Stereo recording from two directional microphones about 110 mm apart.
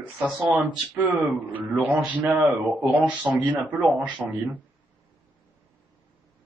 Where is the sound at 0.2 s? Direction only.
15° right (ahead or behind).